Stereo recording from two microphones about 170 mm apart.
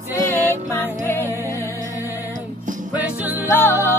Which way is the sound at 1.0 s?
15° left (ahead or behind).